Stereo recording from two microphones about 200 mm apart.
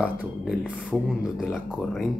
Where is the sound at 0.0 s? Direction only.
5° right (ahead or behind).